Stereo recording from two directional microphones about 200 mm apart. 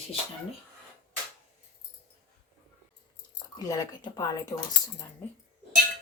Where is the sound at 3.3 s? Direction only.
20° left (ahead or behind).